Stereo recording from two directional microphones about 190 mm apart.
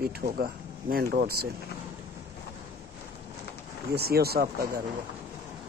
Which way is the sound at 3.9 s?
55° right (ahead or behind).